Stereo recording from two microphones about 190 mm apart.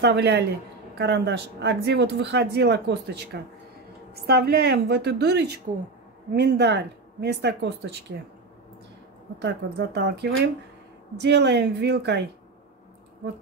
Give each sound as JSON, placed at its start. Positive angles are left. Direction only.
{"t": 0.0, "sound": "speech", "side_deg": -60}
{"t": 9.4, "sound": "speech", "side_deg": -60}